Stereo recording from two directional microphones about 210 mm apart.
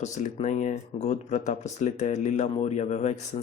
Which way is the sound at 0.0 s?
35° left (ahead or behind).